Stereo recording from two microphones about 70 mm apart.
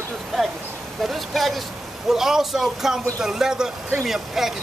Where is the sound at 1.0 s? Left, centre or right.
Centre.